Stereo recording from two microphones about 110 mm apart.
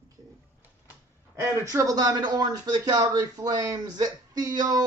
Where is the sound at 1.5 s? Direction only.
25° right (ahead or behind).